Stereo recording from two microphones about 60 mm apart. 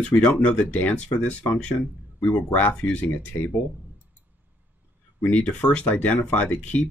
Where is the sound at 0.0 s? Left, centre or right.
Centre.